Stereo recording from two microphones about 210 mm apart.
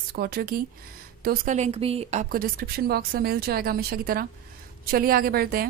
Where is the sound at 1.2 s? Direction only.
35° right (ahead or behind).